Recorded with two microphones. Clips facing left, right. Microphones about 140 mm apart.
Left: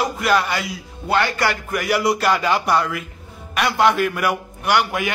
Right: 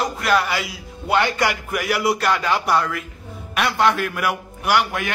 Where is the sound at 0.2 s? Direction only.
Centre (ahead or behind).